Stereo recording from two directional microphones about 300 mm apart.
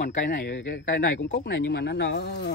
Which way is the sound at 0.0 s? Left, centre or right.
Left.